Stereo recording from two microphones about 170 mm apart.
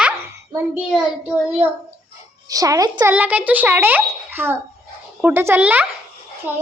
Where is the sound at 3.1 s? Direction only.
10° right (ahead or behind).